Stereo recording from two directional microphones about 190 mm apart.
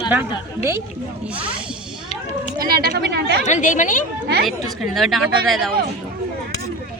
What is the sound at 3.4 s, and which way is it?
Speech, 40° left (ahead or behind).